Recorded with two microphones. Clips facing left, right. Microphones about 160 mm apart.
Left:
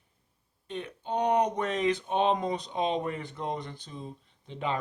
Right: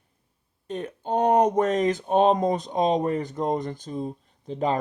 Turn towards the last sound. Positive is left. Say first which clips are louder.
# right 7 dB
turn(degrees=-40)  # may be behind; listen again after turning